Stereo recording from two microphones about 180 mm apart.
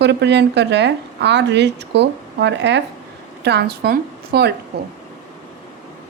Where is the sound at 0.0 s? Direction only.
70° right (ahead or behind).